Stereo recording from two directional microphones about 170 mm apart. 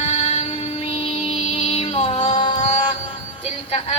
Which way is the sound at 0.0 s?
35° left (ahead or behind).